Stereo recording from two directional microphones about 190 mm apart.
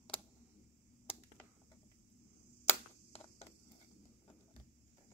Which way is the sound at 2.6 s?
35° left (ahead or behind).